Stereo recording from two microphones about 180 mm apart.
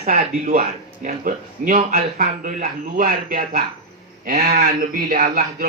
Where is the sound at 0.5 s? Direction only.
50° right (ahead or behind).